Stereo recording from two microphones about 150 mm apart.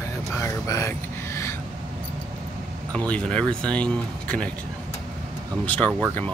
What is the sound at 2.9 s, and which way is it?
Speech, 10° left (ahead or behind).